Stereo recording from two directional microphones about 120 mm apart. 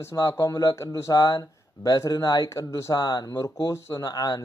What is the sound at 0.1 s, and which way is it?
Speech, 25° left (ahead or behind).